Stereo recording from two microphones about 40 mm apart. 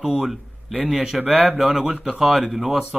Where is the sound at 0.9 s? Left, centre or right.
Centre.